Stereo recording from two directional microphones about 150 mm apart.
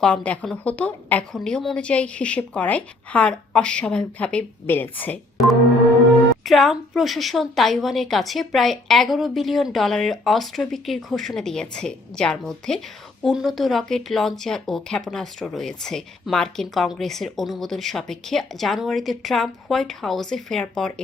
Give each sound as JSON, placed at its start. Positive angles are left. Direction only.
{"t": 0.0, "sound": "a woman's voice", "side_deg": 10}
{"t": 6.4, "sound": "speech", "side_deg": 0}